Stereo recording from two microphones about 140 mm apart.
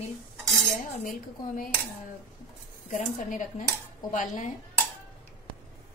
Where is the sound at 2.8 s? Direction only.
65° left (ahead or behind).